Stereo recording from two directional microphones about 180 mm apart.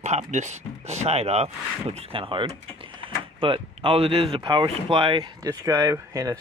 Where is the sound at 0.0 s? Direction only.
40° right (ahead or behind).